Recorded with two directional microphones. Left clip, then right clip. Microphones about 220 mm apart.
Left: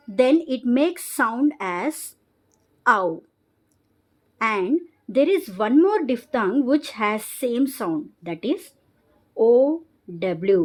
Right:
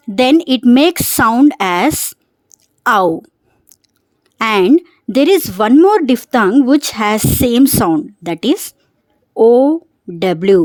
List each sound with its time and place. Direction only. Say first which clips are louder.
0.2 s a woman's voice: right 7 dB; 45° right (ahead or behind)
4.4 s speech: right 11 dB; 45° right (ahead or behind)